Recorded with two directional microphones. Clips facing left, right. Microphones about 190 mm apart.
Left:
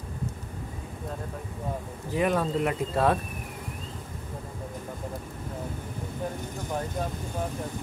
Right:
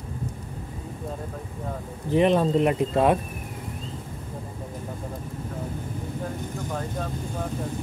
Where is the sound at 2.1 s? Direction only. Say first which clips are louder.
Right 6 dB; 25° right (ahead or behind).